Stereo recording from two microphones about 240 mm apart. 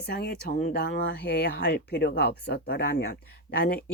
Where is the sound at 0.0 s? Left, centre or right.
Left.